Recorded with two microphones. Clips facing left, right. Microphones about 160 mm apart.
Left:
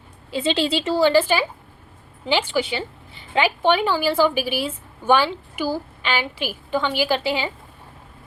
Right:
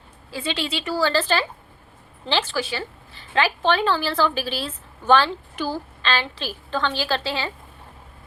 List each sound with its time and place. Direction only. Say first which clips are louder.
0.3 s a woman's voice: left 6 dB; 20° left (ahead or behind)
0.9 s a woman's voice: left 4 dB; 15° left (ahead or behind)